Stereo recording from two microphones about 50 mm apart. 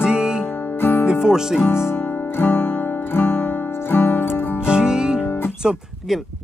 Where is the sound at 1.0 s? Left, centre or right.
Centre.